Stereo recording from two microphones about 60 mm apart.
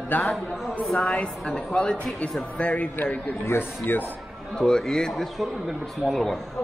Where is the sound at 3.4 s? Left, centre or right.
Left.